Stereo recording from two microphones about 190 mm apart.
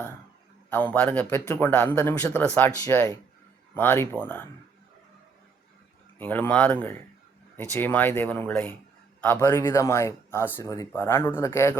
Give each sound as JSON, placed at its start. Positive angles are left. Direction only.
{"t": 0.7, "sound": "speech", "side_deg": 10}
{"t": 6.1, "sound": "speech", "side_deg": 10}